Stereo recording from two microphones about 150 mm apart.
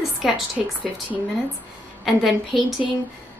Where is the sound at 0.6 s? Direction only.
Centre (ahead or behind).